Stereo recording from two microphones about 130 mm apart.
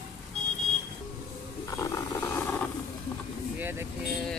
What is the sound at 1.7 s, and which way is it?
Roar, 25° left (ahead or behind).